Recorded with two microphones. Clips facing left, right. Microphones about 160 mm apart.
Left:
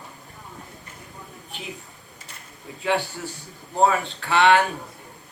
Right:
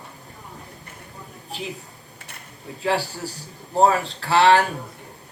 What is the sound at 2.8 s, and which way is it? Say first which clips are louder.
A man's voice: right 1 dB; 35° right (ahead or behind).